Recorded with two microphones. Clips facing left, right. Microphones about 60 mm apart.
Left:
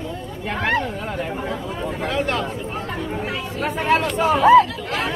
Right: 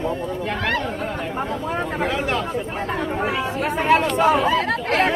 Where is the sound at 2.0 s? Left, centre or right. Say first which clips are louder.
Even; centre.